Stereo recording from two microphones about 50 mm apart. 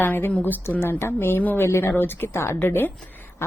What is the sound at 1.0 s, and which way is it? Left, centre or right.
A woman's voice, left.